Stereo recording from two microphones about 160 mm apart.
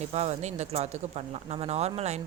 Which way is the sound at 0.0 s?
45° right (ahead or behind).